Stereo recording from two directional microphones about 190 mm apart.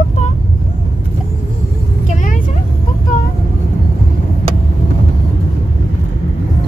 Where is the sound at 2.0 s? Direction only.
40° left (ahead or behind).